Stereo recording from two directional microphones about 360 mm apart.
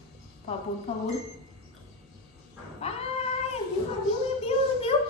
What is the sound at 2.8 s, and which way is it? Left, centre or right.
Cat, centre.